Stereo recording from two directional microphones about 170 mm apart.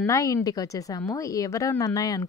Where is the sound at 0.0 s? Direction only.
20° left (ahead or behind).